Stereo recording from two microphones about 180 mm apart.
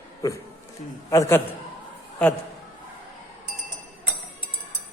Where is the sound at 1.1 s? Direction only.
15° left (ahead or behind).